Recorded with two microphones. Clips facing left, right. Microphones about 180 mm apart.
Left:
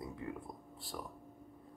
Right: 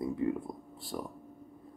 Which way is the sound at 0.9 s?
20° right (ahead or behind).